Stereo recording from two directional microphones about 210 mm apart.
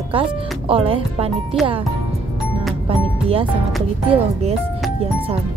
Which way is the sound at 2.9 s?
25° right (ahead or behind).